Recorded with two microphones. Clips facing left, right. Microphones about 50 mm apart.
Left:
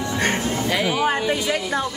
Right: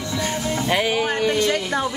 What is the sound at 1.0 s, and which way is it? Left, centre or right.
Speech, centre.